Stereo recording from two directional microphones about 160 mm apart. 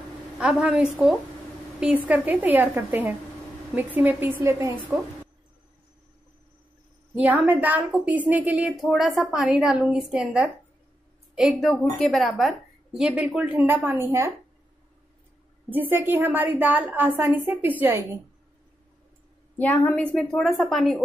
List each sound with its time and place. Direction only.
0.4 s a woman's voice: 5° right (ahead or behind)
7.2 s a woman's voice: 10° right (ahead or behind)
15.7 s a woman's voice: 10° right (ahead or behind)
19.5 s a woman's voice: 10° left (ahead or behind)
20.3 s a woman's voice: centre (ahead or behind)